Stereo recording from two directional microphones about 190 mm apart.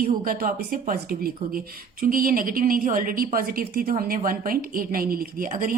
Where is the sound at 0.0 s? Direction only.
50° right (ahead or behind).